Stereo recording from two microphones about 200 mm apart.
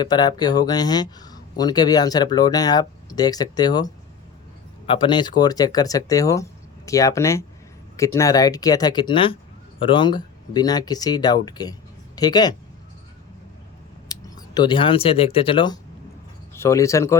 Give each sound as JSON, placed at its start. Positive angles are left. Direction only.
{"t": 0.0, "sound": "speech", "side_deg": 20}
{"t": 14.1, "sound": "speech", "side_deg": 20}